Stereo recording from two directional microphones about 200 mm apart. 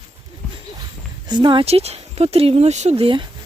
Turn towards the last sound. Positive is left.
turn(degrees=-25)  # may be behind; listen again after turning